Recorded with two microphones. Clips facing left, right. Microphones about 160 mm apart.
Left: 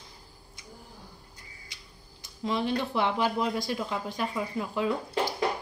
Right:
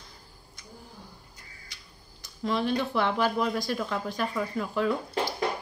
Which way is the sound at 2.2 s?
20° left (ahead or behind).